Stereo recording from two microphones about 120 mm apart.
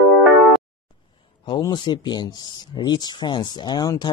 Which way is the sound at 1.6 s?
35° left (ahead or behind).